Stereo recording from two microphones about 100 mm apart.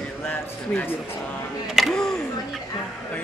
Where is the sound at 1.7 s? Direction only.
Centre (ahead or behind).